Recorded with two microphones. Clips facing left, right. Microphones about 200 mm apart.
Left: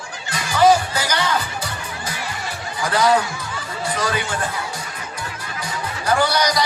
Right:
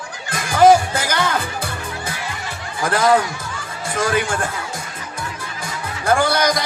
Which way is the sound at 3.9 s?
50° right (ahead or behind).